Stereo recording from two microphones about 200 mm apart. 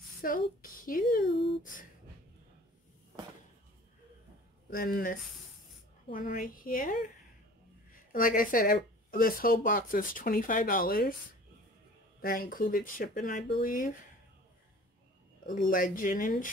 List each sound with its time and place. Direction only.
0.2 s speech: 45° left (ahead or behind)
4.6 s speech: 45° left (ahead or behind)
6.1 s speech: 45° left (ahead or behind)
12.2 s speech: 45° left (ahead or behind)
15.4 s speech: 45° left (ahead or behind)